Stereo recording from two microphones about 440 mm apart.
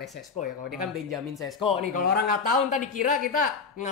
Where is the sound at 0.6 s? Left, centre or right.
Right.